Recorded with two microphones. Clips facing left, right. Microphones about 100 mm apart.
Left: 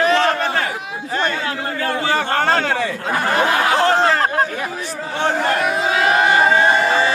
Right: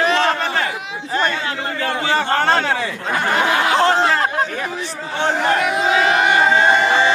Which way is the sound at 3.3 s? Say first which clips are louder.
Even; 25° right (ahead or behind).